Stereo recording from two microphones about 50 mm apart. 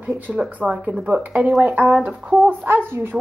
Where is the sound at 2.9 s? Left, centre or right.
Right.